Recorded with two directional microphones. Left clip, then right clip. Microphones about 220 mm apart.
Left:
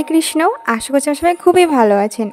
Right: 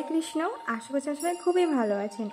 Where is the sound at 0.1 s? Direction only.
45° left (ahead or behind).